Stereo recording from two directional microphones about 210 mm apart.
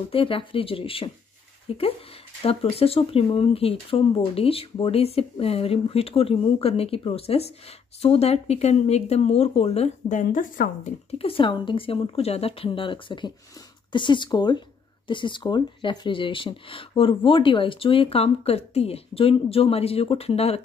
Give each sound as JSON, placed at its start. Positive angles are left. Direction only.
{"t": 0.1, "sound": "speech", "side_deg": 25}